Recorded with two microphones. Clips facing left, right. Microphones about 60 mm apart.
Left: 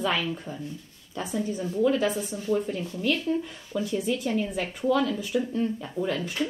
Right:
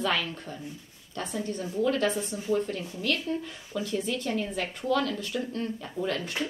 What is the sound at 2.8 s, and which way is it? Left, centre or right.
Speech, centre.